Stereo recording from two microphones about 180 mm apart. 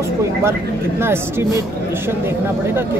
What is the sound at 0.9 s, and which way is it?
Speech, 15° right (ahead or behind).